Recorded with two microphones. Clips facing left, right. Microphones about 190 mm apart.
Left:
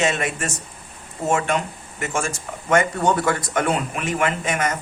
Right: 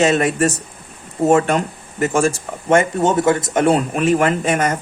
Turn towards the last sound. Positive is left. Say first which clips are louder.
# right 6 dB
turn(degrees=-35)  # may be behind; listen again after turning